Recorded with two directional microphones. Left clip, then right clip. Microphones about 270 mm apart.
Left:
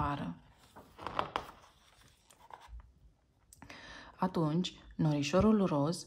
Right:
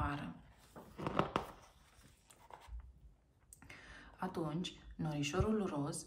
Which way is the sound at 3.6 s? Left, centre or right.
Centre.